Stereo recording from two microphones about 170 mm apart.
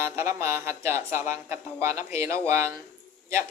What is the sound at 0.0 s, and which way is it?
Speech, 15° right (ahead or behind).